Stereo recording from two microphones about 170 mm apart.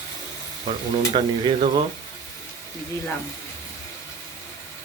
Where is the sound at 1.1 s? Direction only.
30° right (ahead or behind).